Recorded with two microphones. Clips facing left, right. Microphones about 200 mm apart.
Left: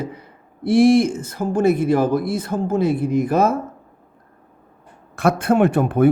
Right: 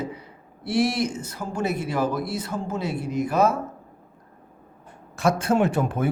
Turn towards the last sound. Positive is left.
turn(degrees=60)  # may be behind; listen again after turning